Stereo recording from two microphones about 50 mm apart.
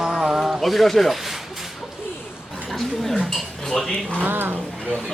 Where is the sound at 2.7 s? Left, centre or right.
Centre.